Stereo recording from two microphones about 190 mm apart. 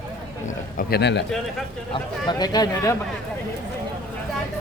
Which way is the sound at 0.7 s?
60° left (ahead or behind).